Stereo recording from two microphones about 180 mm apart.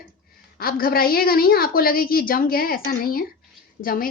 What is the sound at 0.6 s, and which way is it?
A woman's voice, 55° left (ahead or behind).